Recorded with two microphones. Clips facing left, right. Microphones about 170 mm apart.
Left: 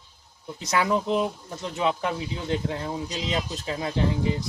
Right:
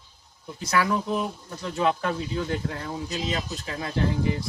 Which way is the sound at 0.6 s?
20° left (ahead or behind).